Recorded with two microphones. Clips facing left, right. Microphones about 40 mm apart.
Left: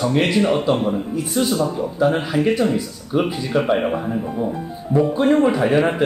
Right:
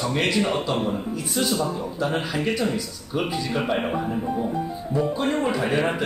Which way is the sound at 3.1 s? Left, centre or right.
Centre.